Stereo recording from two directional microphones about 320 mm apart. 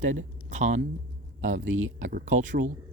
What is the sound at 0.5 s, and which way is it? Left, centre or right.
A man's voice, right.